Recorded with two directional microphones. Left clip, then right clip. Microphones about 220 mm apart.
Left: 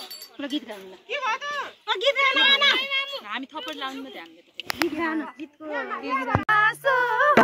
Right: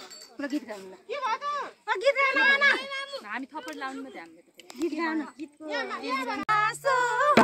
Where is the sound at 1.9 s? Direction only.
10° right (ahead or behind).